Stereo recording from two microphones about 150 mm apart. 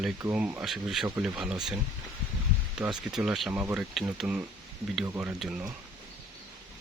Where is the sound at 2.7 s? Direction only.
5° right (ahead or behind).